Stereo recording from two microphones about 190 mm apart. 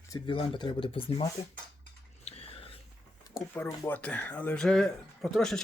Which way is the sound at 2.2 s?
30° left (ahead or behind).